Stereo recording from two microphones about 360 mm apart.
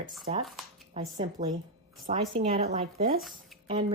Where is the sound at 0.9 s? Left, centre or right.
Centre.